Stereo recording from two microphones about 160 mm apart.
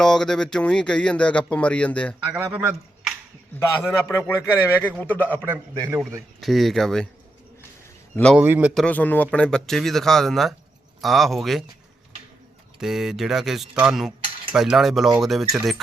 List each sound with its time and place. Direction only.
0.0 s speech: 5° left (ahead or behind)
2.2 s speech: 10° right (ahead or behind)
3.8 s speech: 15° left (ahead or behind)
5.5 s a man's voice: 10° right (ahead or behind)
6.4 s speech: centre (ahead or behind)
8.1 s a man's voice: 5° left (ahead or behind)
8.4 s a man's voice: 10° right (ahead or behind)
8.7 s speech: 5° left (ahead or behind)
12.8 s speech: 5° right (ahead or behind)